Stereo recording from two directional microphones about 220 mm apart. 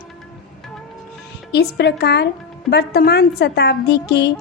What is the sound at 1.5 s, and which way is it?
A woman's voice, 50° left (ahead or behind).